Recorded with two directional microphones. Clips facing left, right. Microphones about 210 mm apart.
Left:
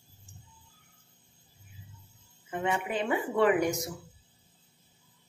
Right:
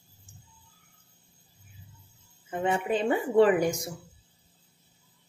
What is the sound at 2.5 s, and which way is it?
Speech, 30° right (ahead or behind).